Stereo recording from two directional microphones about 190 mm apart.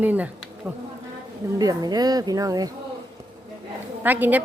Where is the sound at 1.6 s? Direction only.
20° right (ahead or behind).